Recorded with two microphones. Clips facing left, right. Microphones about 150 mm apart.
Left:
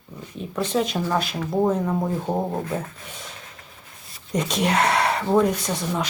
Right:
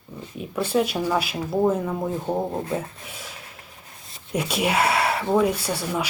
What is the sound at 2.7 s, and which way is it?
Speech, 5° right (ahead or behind).